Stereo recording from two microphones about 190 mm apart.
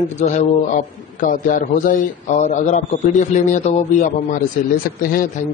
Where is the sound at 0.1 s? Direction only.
35° left (ahead or behind).